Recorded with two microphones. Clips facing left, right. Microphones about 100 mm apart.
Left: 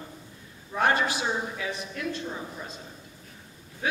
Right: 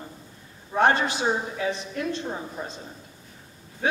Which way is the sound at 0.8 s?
25° right (ahead or behind).